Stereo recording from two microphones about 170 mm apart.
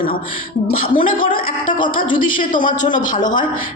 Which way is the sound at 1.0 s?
55° left (ahead or behind).